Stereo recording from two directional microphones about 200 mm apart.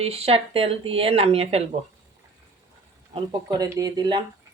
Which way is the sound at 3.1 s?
20° right (ahead or behind).